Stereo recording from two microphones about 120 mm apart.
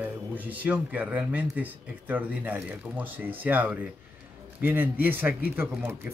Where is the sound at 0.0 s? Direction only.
15° right (ahead or behind).